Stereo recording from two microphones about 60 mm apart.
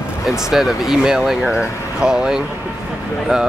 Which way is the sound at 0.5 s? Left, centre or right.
Centre.